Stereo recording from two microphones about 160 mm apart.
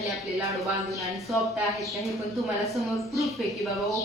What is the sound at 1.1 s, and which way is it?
Speech, centre (ahead or behind).